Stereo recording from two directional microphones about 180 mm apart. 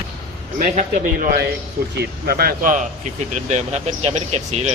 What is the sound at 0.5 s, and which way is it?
A man's voice, 50° right (ahead or behind).